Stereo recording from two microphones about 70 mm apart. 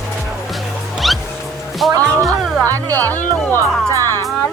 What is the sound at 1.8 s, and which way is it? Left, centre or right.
Speech, centre.